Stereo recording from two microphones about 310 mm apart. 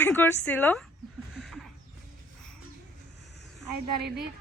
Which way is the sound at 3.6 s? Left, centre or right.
Right.